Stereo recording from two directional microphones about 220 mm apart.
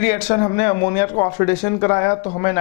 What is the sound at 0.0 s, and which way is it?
A man's voice, 10° left (ahead or behind).